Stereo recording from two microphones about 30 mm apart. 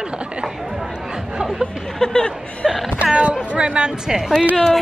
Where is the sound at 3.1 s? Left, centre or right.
Right.